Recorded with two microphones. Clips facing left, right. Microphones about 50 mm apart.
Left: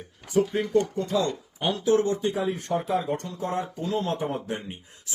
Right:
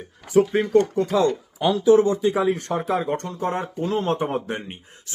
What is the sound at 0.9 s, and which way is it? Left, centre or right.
Speech, right.